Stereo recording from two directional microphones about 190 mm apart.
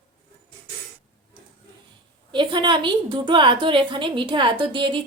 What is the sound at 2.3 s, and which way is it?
A woman's voice, 25° right (ahead or behind).